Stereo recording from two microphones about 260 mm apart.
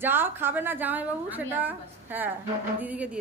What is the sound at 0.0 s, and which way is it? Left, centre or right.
A woman's voice, centre.